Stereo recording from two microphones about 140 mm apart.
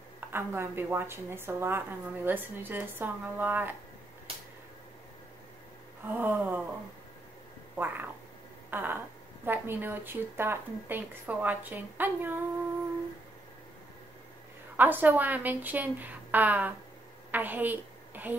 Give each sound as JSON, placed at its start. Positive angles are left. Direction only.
{"t": 0.2, "sound": "speech", "side_deg": -15}
{"t": 6.1, "sound": "speech", "side_deg": -15}
{"t": 7.7, "sound": "speech", "side_deg": -15}
{"t": 14.8, "sound": "a woman's voice", "side_deg": -15}